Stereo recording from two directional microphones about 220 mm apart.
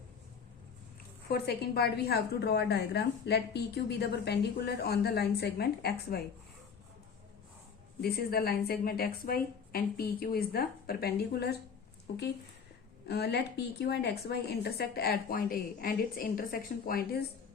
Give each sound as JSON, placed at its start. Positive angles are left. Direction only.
{"t": 1.3, "sound": "a woman's voice", "side_deg": 45}
{"t": 8.0, "sound": "a woman's voice", "side_deg": 45}
{"t": 13.1, "sound": "a woman's voice", "side_deg": 50}